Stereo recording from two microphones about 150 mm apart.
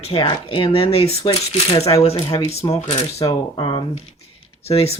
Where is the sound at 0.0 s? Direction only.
35° left (ahead or behind).